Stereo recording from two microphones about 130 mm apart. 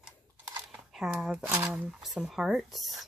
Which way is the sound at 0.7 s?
5° right (ahead or behind).